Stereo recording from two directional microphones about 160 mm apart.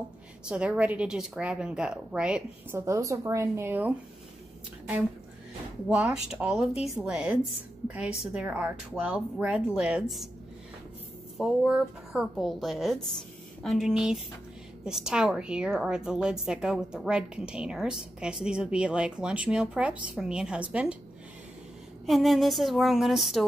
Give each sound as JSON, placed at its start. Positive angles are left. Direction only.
{"t": 0.5, "sound": "a woman's voice", "side_deg": -5}
{"t": 2.8, "sound": "speech", "side_deg": -20}
{"t": 5.9, "sound": "a woman's voice", "side_deg": -5}
{"t": 11.3, "sound": "a woman's voice", "side_deg": -5}
{"t": 22.0, "sound": "a woman's voice", "side_deg": 0}